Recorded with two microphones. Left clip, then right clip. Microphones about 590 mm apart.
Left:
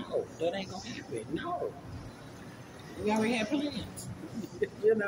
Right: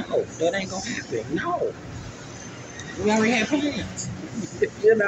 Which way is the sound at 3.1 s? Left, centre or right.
Left.